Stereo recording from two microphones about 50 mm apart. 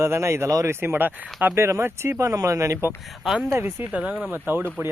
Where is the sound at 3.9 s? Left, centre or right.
Right.